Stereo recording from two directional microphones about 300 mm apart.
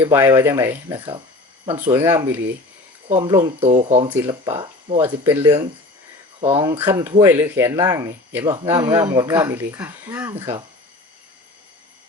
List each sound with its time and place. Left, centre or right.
0.0 s speech: centre